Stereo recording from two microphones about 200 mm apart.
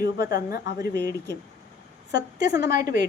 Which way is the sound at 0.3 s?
50° left (ahead or behind).